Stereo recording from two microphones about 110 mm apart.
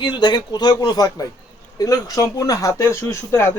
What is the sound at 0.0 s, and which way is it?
A man's voice, 40° left (ahead or behind).